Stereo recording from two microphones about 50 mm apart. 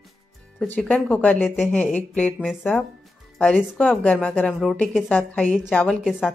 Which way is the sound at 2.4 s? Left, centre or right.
Centre.